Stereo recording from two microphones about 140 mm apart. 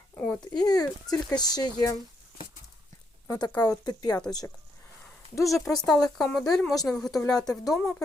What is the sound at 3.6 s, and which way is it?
Speech, 30° left (ahead or behind).